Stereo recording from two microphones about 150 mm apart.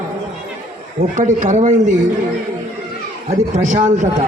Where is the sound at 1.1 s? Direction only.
55° right (ahead or behind).